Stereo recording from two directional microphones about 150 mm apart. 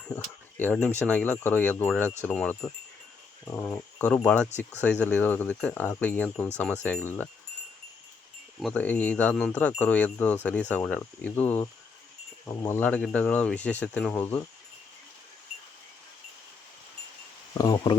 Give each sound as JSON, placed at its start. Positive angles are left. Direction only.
{"t": 0.5, "sound": "speech", "side_deg": 5}
{"t": 3.7, "sound": "speech", "side_deg": 10}
{"t": 8.6, "sound": "speech", "side_deg": 10}
{"t": 17.6, "sound": "speech", "side_deg": 30}